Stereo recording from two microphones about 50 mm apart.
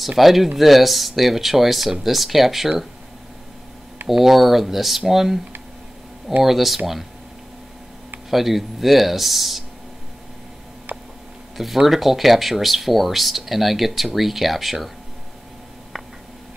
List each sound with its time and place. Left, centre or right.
0.2 s speech: centre
4.1 s speech: centre
6.4 s speech: centre
8.3 s speech: centre
10.9 s tick: right
11.5 s speech: centre